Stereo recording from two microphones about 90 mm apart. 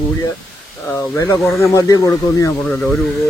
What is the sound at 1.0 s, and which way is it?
Speech, 30° left (ahead or behind).